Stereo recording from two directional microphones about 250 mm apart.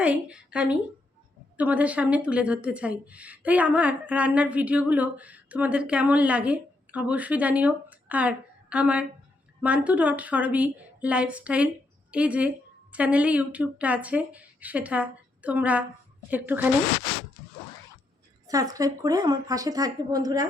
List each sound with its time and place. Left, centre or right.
0.0 s a woman's voice: centre
18.4 s speech: centre